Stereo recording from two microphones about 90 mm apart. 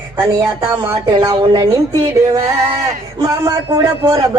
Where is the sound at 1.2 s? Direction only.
50° right (ahead or behind).